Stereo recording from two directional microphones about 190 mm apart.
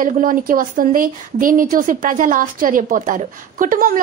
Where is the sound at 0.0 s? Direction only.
45° right (ahead or behind).